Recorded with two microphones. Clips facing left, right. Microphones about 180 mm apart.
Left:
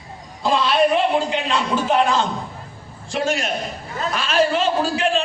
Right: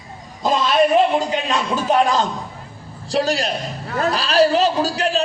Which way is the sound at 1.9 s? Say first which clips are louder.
Right 2 dB; 40° right (ahead or behind).